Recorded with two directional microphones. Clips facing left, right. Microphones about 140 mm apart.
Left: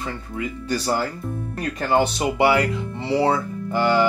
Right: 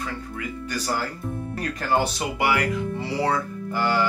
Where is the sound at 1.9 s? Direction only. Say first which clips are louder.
Left 4 dB; 20° left (ahead or behind).